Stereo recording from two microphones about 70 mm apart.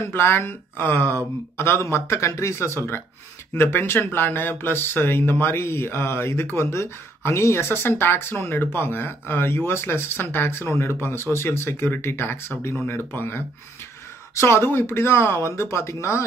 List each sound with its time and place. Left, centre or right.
0.0 s speech: left